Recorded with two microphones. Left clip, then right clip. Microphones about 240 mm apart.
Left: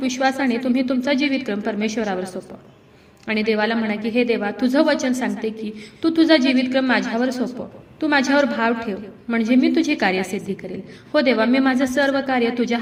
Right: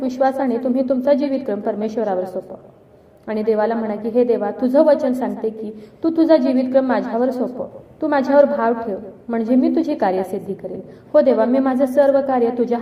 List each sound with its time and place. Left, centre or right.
0.0 s a woman's voice: left